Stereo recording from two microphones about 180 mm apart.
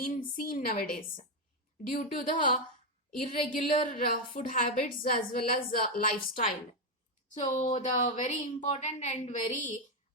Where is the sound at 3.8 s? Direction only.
50° left (ahead or behind).